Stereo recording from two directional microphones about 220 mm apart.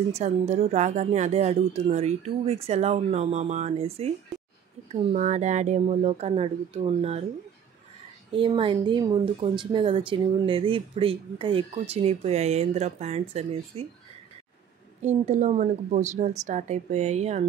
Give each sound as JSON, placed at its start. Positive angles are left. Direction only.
{"t": 0.1, "sound": "speech", "side_deg": -30}
{"t": 5.1, "sound": "speech", "side_deg": -35}
{"t": 8.3, "sound": "speech", "side_deg": -25}
{"t": 15.0, "sound": "a woman's voice", "side_deg": -30}